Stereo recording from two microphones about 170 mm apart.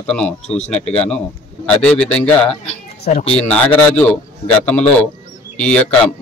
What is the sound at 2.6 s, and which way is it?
Speech, 40° left (ahead or behind).